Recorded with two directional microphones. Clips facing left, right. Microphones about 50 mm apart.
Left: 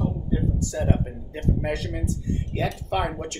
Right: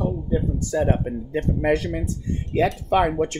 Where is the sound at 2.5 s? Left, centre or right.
Right.